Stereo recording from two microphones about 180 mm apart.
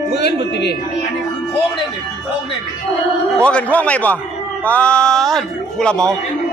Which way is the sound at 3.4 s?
5° left (ahead or behind).